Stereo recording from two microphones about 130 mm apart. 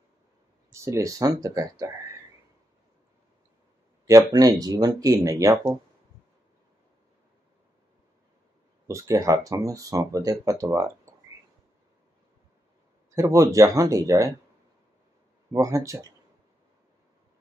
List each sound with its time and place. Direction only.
0.7 s speech: 20° right (ahead or behind)
4.1 s speech: 30° right (ahead or behind)
8.8 s speech: 25° right (ahead or behind)
13.1 s speech: 25° right (ahead or behind)
15.5 s speech: 25° right (ahead or behind)